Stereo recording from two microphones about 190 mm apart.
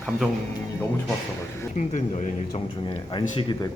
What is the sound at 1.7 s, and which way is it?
Speech, 40° left (ahead or behind).